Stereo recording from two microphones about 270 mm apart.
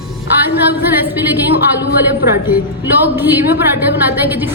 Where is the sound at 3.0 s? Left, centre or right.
Centre.